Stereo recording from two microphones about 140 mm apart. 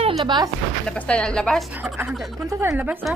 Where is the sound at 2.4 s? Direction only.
20° right (ahead or behind).